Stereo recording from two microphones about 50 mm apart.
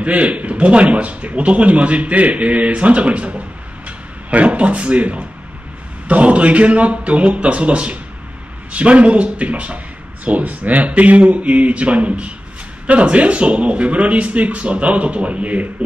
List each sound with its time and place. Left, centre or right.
0.0 s speech: right